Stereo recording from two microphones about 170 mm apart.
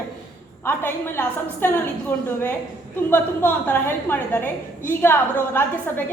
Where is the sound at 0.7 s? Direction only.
15° left (ahead or behind).